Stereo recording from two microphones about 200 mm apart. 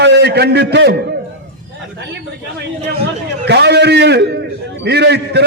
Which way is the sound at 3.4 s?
55° right (ahead or behind).